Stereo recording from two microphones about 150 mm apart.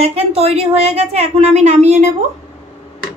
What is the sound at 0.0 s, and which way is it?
A woman's voice, 40° right (ahead or behind).